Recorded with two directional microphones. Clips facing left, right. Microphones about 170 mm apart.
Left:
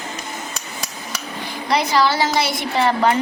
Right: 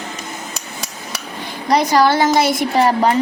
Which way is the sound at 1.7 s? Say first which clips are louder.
Right 4 dB; 45° right (ahead or behind).